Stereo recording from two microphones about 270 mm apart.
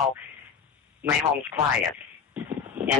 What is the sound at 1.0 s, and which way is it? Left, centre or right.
Speech, centre.